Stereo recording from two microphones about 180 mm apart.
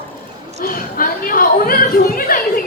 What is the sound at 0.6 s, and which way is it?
Speech, 50° left (ahead or behind).